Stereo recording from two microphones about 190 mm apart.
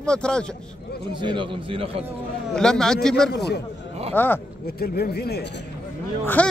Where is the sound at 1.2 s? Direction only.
25° right (ahead or behind).